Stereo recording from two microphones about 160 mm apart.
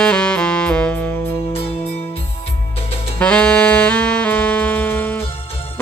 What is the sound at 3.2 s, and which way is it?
Music, 5° left (ahead or behind).